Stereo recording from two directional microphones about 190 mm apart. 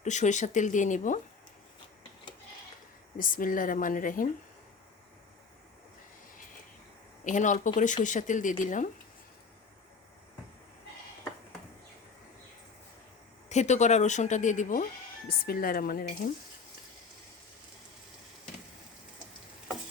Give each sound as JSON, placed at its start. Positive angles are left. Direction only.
{"t": 0.0, "sound": "a woman's voice", "side_deg": 40}
{"t": 3.2, "sound": "speech", "side_deg": 45}
{"t": 7.3, "sound": "a woman's voice", "side_deg": 40}
{"t": 13.5, "sound": "a woman's voice", "side_deg": 35}